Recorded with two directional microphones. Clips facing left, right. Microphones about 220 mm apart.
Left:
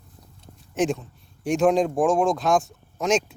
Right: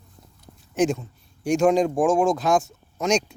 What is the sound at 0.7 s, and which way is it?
A man's voice, centre (ahead or behind).